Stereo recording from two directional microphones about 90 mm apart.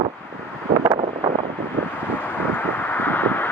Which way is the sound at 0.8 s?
60° right (ahead or behind).